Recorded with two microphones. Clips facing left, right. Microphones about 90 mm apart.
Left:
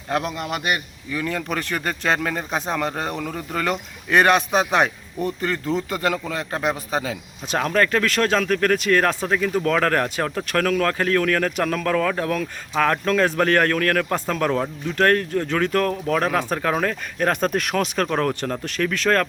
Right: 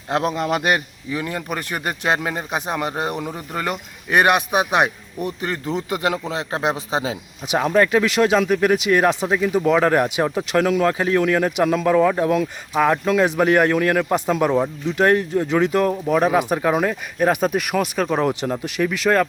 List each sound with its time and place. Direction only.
0.1 s a man's voice: 30° right (ahead or behind)
1.1 s speech: 20° right (ahead or behind)